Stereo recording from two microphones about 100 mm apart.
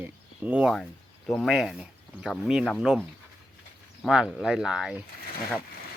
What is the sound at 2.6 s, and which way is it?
Speech, 10° left (ahead or behind).